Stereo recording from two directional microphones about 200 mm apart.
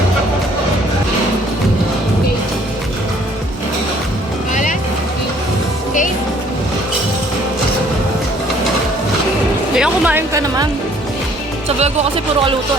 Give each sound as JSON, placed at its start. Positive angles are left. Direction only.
{"t": 9.7, "sound": "music", "side_deg": -5}
{"t": 11.8, "sound": "speech", "side_deg": -30}